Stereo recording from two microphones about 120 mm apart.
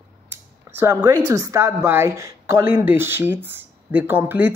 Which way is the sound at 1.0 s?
35° right (ahead or behind).